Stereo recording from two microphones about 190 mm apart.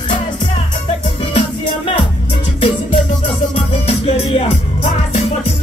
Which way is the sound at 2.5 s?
30° left (ahead or behind).